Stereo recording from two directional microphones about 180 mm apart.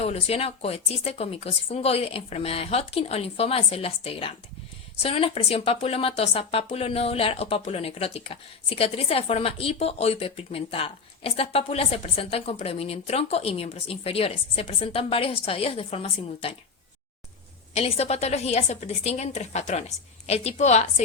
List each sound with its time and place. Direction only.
0.0 s speech: 35° left (ahead or behind)
17.7 s speech: 35° left (ahead or behind)